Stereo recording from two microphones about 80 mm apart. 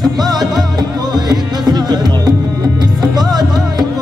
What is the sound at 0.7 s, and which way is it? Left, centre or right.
Music, right.